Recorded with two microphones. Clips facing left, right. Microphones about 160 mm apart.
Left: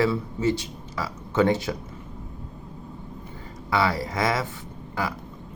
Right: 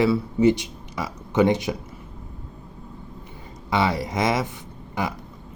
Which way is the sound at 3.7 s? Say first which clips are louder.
Right 1 dB; 20° right (ahead or behind).